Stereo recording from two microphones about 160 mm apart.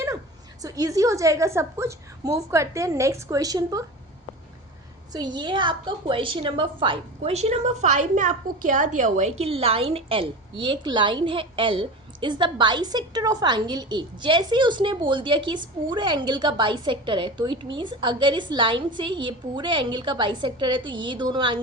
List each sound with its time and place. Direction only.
0.6 s a woman's voice: 20° right (ahead or behind)
5.1 s a woman's voice: 25° right (ahead or behind)